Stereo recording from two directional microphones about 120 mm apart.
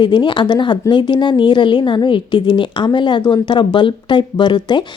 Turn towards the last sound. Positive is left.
turn(degrees=40)  # may be behind; listen again after turning